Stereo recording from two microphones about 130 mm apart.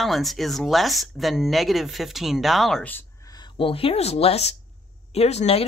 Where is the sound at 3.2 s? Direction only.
30° left (ahead or behind).